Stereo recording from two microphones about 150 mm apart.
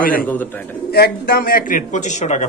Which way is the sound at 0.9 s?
90° left.